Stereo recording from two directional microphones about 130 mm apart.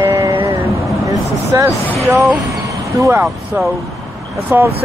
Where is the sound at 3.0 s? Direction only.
20° right (ahead or behind).